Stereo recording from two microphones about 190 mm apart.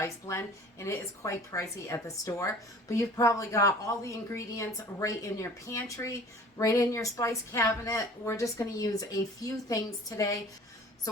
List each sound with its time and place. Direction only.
0.0 s speech: 15° left (ahead or behind)